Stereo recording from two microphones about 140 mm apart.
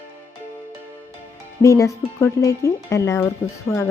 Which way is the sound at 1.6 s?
20° left (ahead or behind).